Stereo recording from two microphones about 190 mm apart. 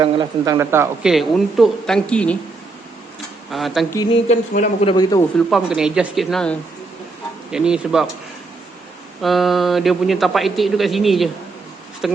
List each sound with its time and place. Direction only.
0.0 s speech: 20° right (ahead or behind)
1.0 s a man's voice: centre (ahead or behind)
3.5 s a man's voice: centre (ahead or behind)
3.9 s speech: 25° left (ahead or behind)
4.3 s a man's voice: 35° left (ahead or behind)
5.5 s a man's voice: centre (ahead or behind)
9.2 s a man's voice: centre (ahead or behind)